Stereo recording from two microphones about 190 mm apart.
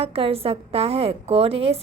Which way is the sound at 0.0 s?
30° right (ahead or behind).